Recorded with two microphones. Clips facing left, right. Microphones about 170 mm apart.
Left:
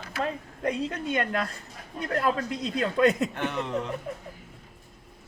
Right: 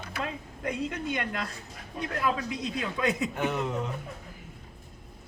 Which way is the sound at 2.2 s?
55° left (ahead or behind).